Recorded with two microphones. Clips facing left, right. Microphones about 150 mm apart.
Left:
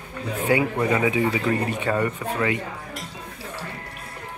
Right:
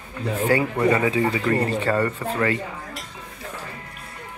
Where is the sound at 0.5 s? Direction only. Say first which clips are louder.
Right 1 dB; 20° left (ahead or behind).